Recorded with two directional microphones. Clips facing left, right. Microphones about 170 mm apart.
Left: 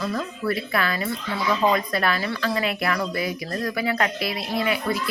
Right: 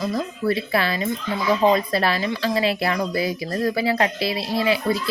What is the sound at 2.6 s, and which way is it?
Speech, 30° right (ahead or behind).